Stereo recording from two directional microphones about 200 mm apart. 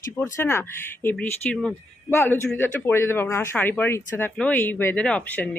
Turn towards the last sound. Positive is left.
turn(degrees=10)  # may be behind; listen again after turning